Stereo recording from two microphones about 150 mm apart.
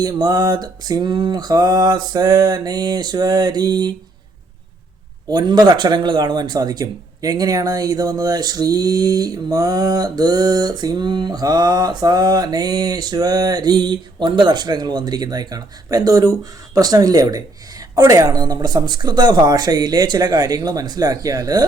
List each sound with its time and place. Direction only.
0.0 s speech: 25° right (ahead or behind)
5.3 s speech: 25° right (ahead or behind)